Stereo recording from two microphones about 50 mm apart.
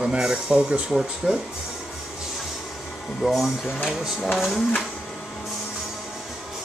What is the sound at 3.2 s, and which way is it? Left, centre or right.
Speech, centre.